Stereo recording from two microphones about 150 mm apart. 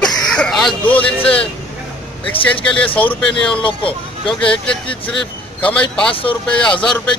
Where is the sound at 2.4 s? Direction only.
35° left (ahead or behind).